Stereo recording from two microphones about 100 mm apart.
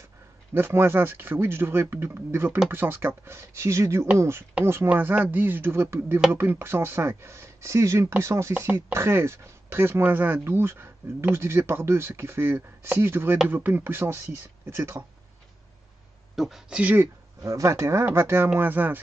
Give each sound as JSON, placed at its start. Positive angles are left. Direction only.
{"t": 0.6, "sound": "speech", "side_deg": -25}
{"t": 16.3, "sound": "speech", "side_deg": 0}
{"t": 17.4, "sound": "speech", "side_deg": -30}